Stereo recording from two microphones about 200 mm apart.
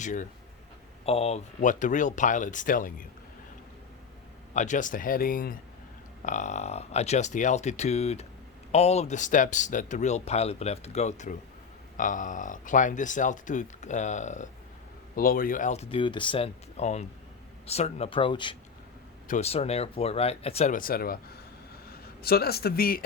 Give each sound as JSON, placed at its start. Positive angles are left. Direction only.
{"t": 0.0, "sound": "speech", "side_deg": 40}
{"t": 4.5, "sound": "speech", "side_deg": 40}
{"t": 22.2, "sound": "speech", "side_deg": 50}